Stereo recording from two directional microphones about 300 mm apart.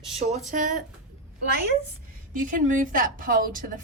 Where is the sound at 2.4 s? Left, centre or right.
Right.